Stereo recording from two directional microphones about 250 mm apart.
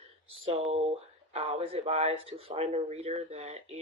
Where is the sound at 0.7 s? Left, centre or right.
Right.